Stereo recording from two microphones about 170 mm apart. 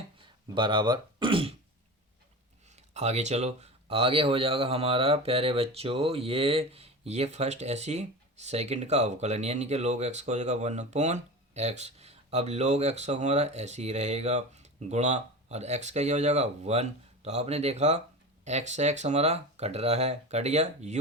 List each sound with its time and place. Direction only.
0.2 s speech: 30° right (ahead or behind)
2.6 s speech: 40° right (ahead or behind)